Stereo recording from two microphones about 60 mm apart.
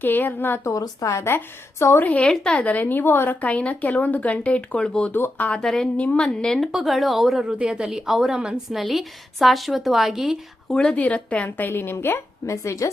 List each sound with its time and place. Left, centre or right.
0.0 s a woman's voice: left
0.6 s a woman's voice: left
1.3 s a woman's voice: left
2.2 s speech: centre; by 3.3 s left
3.4 s speech: left
5.1 s a woman's voice: left
5.6 s speech: centre
6.0 s speech: left
6.2 s speech: centre
6.7 s a woman's voice: centre
10.7 s speech: centre
10.9 s speech: left
11.7 s a woman's voice: left